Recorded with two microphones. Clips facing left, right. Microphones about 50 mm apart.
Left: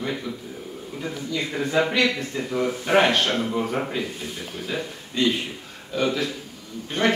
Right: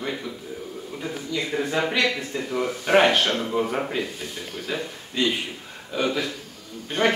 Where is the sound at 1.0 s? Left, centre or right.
Centre.